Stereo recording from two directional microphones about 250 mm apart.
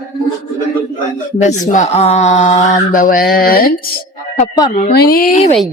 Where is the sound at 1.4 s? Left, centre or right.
Left.